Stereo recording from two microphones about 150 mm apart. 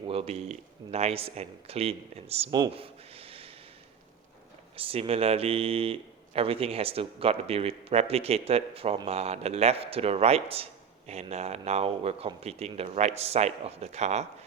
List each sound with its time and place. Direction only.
0.1 s a man's voice: 40° right (ahead or behind)
2.7 s a sound: 40° right (ahead or behind)
4.8 s a man's voice: 40° right (ahead or behind)